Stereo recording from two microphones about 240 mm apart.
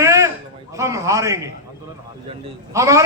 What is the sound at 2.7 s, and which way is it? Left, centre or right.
Speech, centre.